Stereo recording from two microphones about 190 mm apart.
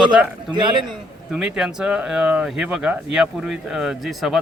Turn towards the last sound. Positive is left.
turn(degrees=0)  # may be behind; listen again after turning